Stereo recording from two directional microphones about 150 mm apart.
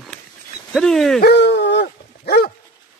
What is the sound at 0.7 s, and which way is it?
Speech, centre (ahead or behind).